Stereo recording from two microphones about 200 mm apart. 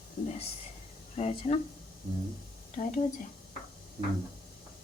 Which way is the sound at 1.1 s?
30° left (ahead or behind).